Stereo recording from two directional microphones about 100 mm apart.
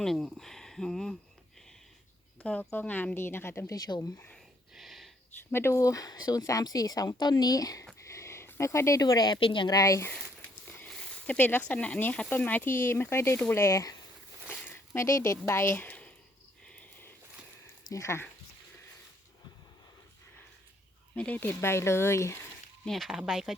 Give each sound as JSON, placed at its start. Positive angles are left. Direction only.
{"t": 0.0, "sound": "speech", "side_deg": 5}
{"t": 2.4, "sound": "speech", "side_deg": 15}
{"t": 3.8, "sound": "speech", "side_deg": 45}
{"t": 4.7, "sound": "snort", "side_deg": 0}
{"t": 5.5, "sound": "speech", "side_deg": 25}
{"t": 8.0, "sound": "a sound", "side_deg": 30}
{"t": 9.4, "sound": "a woman's voice", "side_deg": 60}
{"t": 9.6, "sound": "speech", "side_deg": 35}
{"t": 10.8, "sound": "speech", "side_deg": 10}
{"t": 17.8, "sound": "speech", "side_deg": 30}
{"t": 21.2, "sound": "speech", "side_deg": 15}
{"t": 22.9, "sound": "speech", "side_deg": 0}